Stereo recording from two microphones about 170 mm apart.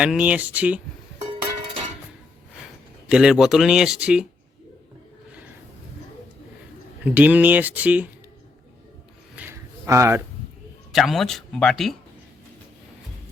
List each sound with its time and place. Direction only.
0.0 s speech: 5° right (ahead or behind)
3.1 s speech: 5° right (ahead or behind)
7.0 s speech: 10° right (ahead or behind)
9.3 s a sound: 10° right (ahead or behind)
10.9 s speech: centre (ahead or behind)